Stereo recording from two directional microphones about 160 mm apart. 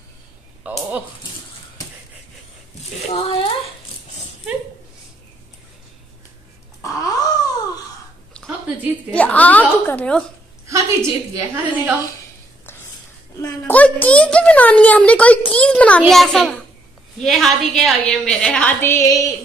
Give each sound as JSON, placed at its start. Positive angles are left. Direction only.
{"t": 0.7, "sound": "a woman's voice", "side_deg": -10}
{"t": 3.1, "sound": "speech", "side_deg": 35}
{"t": 6.8, "sound": "wail", "side_deg": 20}
{"t": 9.1, "sound": "a child's voice", "side_deg": 10}
{"t": 10.7, "sound": "a woman's voice", "side_deg": -20}
{"t": 13.4, "sound": "a child's voice", "side_deg": 10}